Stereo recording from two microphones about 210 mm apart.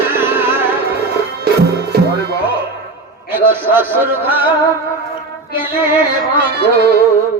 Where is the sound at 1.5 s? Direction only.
45° right (ahead or behind).